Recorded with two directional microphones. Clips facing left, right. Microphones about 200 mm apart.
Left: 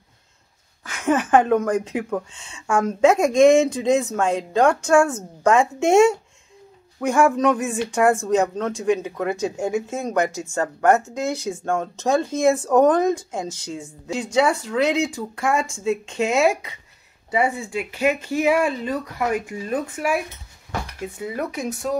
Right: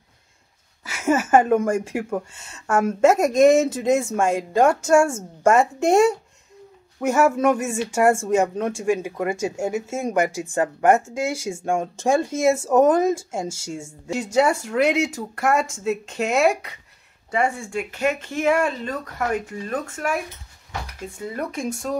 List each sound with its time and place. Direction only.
0.8 s speech: 10° right (ahead or behind)
13.6 s a woman's voice: 45° right (ahead or behind)
14.3 s speech: 10° right (ahead or behind); by 20.2 s 10° left (ahead or behind)
21.2 s speech: 5° left (ahead or behind)